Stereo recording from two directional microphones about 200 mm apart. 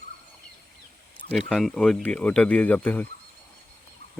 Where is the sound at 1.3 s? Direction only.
5° left (ahead or behind).